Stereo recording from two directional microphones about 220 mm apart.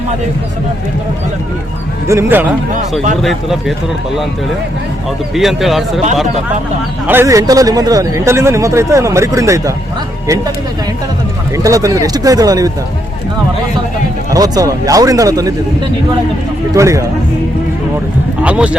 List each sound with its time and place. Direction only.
2.0 s a man's voice: 10° right (ahead or behind)
5.3 s a man's voice: centre (ahead or behind)
7.1 s speech: 10° right (ahead or behind)
11.5 s speech: 15° right (ahead or behind)
14.3 s speech: 15° right (ahead or behind)
16.7 s speech: 15° right (ahead or behind)
18.4 s a man's voice: 5° right (ahead or behind)